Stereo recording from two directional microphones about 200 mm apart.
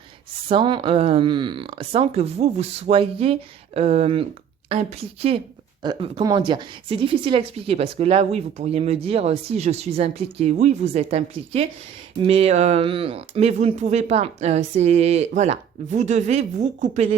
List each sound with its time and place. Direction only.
0.4 s a woman's voice: 25° right (ahead or behind)